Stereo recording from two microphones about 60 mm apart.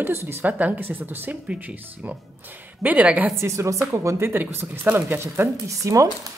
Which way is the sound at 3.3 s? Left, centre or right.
Right.